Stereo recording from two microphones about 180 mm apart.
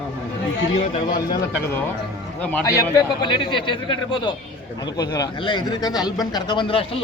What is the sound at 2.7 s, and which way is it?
A man's voice, 20° left (ahead or behind).